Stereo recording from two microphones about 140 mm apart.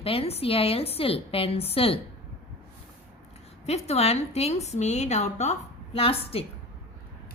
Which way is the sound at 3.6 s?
50° left (ahead or behind).